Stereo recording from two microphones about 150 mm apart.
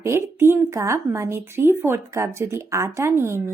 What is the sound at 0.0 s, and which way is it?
A woman's voice, 15° right (ahead or behind).